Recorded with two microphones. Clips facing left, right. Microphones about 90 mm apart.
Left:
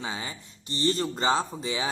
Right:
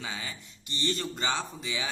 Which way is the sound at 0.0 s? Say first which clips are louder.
Left 4 dB; 30° left (ahead or behind).